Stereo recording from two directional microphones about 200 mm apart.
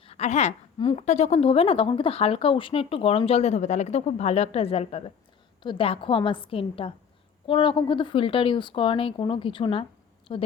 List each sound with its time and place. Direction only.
0.0 s a woman's voice: 30° left (ahead or behind)